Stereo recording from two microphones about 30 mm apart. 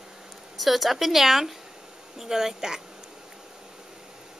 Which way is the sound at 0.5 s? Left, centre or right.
Centre.